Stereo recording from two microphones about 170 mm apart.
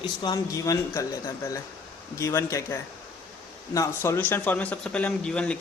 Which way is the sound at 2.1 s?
20° left (ahead or behind).